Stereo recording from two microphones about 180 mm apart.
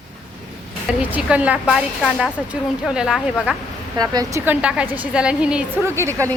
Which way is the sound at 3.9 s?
20° right (ahead or behind).